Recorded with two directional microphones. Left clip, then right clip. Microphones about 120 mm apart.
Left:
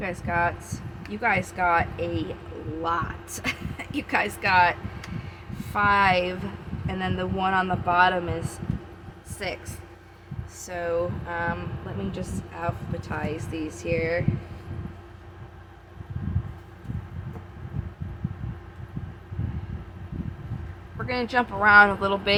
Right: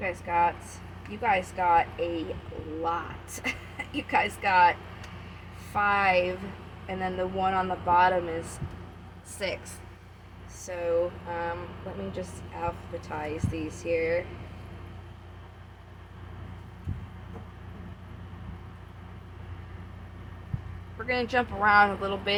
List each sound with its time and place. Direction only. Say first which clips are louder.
0.0 s speech: even; 45° left (ahead or behind)
5.7 s speech: left 3 dB; 50° left (ahead or behind)
9.4 s speech: even; 20° left (ahead or behind)
10.7 s speech: even; 50° left (ahead or behind)
21.0 s speech: left 2 dB; 30° left (ahead or behind)